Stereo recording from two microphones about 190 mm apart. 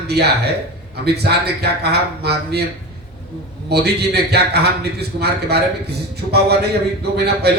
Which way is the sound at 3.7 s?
60° right (ahead or behind).